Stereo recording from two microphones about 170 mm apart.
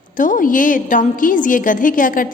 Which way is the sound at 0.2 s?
50° left (ahead or behind).